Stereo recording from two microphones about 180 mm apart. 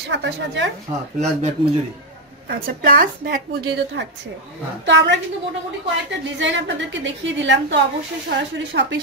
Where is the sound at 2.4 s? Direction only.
50° right (ahead or behind).